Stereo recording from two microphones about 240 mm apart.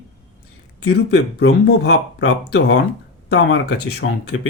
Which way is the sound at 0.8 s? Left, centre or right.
Left.